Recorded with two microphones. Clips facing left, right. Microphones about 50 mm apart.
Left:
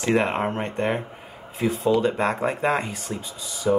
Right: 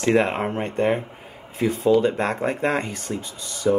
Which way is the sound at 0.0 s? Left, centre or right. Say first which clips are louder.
Right 2 dB; centre.